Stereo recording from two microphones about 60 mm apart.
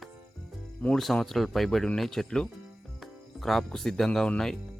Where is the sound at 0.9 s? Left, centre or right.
Centre.